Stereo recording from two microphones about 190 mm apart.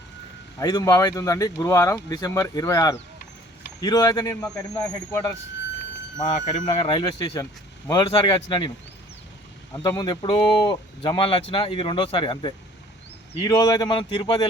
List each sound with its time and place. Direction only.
0.6 s speech: 20° left (ahead or behind)
6.2 s speech: 35° left (ahead or behind)
9.7 s speech: 20° left (ahead or behind)